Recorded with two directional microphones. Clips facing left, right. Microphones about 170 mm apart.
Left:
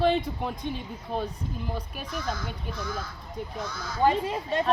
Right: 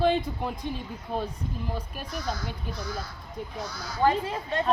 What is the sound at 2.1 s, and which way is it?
Speech, 35° right (ahead or behind).